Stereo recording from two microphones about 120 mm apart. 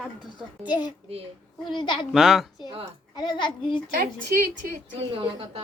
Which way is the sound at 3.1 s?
40° left (ahead or behind).